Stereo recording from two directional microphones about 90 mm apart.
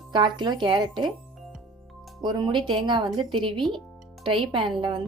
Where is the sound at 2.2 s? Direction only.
55° right (ahead or behind).